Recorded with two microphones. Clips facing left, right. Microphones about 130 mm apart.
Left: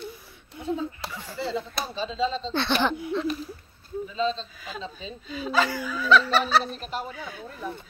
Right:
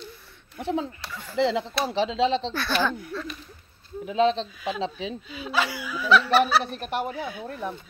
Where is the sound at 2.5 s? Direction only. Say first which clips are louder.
Left 1 dB; 25° left (ahead or behind).